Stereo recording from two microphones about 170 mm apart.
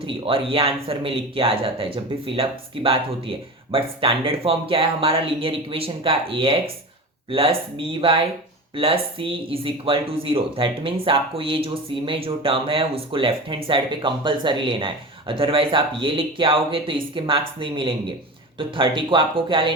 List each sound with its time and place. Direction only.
0.0 s speech: 30° right (ahead or behind)